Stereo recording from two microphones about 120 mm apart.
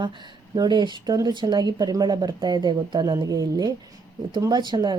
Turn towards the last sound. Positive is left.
turn(degrees=-35)  # may be behind; listen again after turning